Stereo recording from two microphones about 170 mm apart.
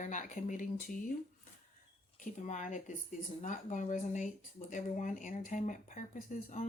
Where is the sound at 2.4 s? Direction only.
45° left (ahead or behind).